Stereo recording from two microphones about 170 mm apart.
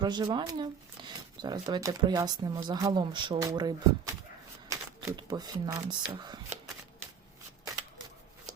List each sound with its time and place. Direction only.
0.0 s speech: 25° right (ahead or behind)